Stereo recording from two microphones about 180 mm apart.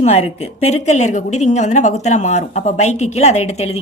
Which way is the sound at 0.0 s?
35° left (ahead or behind).